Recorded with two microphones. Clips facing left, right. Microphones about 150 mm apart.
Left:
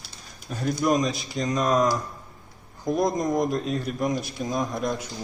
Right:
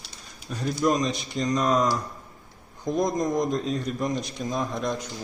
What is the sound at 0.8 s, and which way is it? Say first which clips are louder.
A man's voice: even; 5° left (ahead or behind).